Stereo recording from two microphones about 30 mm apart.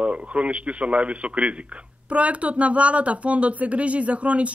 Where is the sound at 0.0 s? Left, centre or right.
Right.